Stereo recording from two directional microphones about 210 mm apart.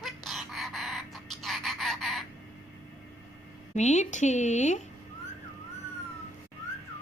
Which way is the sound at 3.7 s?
35° left (ahead or behind).